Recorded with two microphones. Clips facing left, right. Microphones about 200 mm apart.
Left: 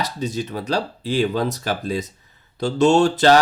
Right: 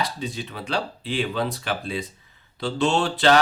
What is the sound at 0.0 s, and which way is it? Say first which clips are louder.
Speech: left 4 dB; 45° left (ahead or behind).